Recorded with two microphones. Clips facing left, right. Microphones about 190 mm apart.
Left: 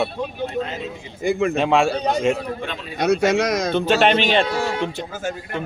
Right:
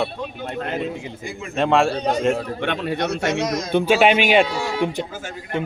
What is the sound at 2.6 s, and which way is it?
Speech, 65° right (ahead or behind).